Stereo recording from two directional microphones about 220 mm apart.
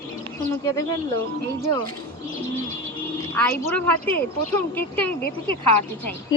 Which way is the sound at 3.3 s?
10° left (ahead or behind).